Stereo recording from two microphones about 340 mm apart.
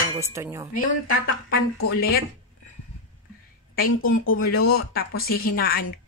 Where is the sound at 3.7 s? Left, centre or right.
Left.